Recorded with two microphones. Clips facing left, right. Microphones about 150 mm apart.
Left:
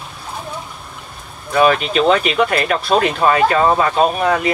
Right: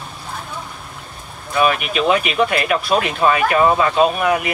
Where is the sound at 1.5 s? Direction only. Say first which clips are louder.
Left 4 dB; 35° left (ahead or behind).